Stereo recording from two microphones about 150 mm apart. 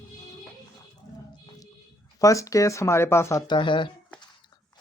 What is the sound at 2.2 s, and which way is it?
Speech, 20° left (ahead or behind).